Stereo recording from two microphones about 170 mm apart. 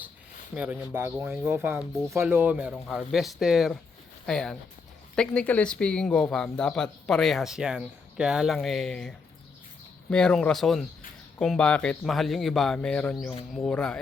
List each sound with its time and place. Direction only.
0.5 s speech: 10° right (ahead or behind)
2.7 s speech: 5° left (ahead or behind)